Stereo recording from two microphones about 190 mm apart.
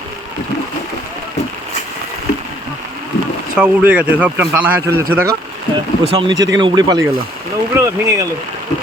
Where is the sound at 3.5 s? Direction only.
10° right (ahead or behind).